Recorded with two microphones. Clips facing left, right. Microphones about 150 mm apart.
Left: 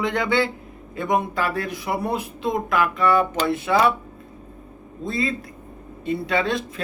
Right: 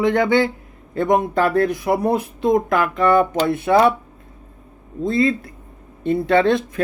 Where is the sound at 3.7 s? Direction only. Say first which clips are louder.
Right 6 dB; 35° right (ahead or behind).